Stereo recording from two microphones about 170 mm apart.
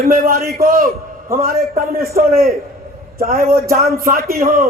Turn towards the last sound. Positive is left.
turn(degrees=-60)  # may be behind; listen again after turning